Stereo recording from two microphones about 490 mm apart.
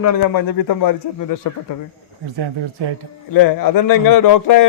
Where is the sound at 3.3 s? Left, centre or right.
Left.